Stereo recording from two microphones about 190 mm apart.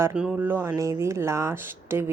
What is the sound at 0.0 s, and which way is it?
Speech, 5° right (ahead or behind).